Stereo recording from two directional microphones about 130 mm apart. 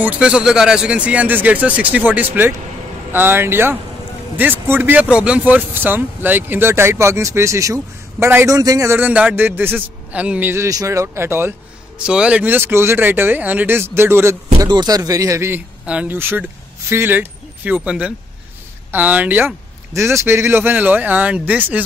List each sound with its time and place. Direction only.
0.0 s speech: 10° right (ahead or behind)
12.0 s speech: 5° right (ahead or behind)
14.6 s speech: 30° right (ahead or behind)
15.8 s speech: 10° right (ahead or behind)